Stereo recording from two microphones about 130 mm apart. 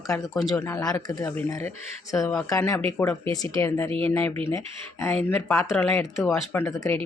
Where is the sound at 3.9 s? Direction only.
50° right (ahead or behind).